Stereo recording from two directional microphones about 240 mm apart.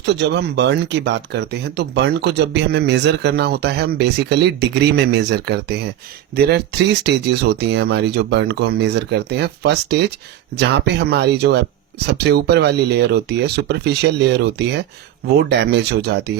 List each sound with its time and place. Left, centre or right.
0.0 s speech: right